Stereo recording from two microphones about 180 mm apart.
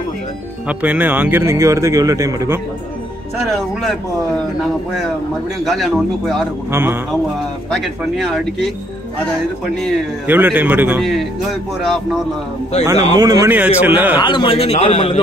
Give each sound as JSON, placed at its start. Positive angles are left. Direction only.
{"t": 0.7, "sound": "speech", "side_deg": -10}
{"t": 3.3, "sound": "speech", "side_deg": 0}
{"t": 5.7, "sound": "speech", "side_deg": 0}
{"t": 6.7, "sound": "speech", "side_deg": -10}
{"t": 7.7, "sound": "speech", "side_deg": 0}
{"t": 10.2, "sound": "speech", "side_deg": -10}
{"t": 13.1, "sound": "speech", "side_deg": -20}
{"t": 14.2, "sound": "a man's voice", "side_deg": 25}